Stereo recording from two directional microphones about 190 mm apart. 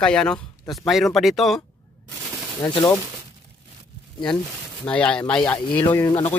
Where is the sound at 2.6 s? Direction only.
25° left (ahead or behind).